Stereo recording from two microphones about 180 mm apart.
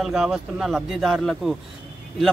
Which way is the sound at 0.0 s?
5° right (ahead or behind).